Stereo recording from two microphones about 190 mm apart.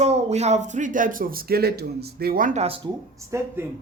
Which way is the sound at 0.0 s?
35° right (ahead or behind).